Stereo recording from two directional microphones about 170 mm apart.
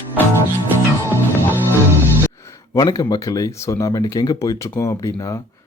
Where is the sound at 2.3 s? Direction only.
15° left (ahead or behind).